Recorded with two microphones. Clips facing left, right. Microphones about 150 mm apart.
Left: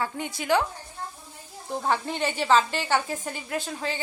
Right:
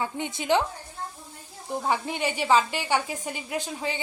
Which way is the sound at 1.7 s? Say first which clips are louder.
Even; 10° right (ahead or behind).